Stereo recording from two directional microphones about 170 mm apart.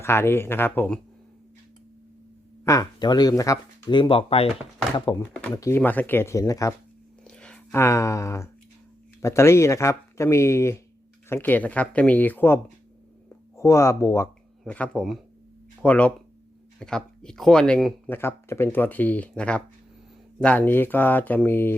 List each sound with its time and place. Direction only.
0.0 s speech: 15° left (ahead or behind)
2.6 s speech: 20° left (ahead or behind)
5.1 s speech: 20° left (ahead or behind)
7.3 s a sound: 5° left (ahead or behind)
9.2 s speech: 15° left (ahead or behind)
13.6 s speech: 15° left (ahead or behind)
14.6 s speech: 5° left (ahead or behind)
18.1 s speech: 15° left (ahead or behind)